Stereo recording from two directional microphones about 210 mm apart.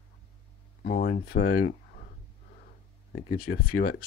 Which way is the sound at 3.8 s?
45° left (ahead or behind).